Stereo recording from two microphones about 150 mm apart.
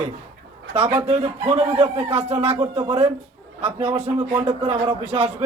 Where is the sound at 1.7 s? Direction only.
40° right (ahead or behind).